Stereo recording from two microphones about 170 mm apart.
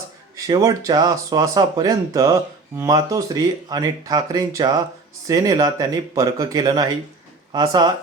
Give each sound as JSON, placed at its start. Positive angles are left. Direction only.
{"t": 0.3, "sound": "speech", "side_deg": -20}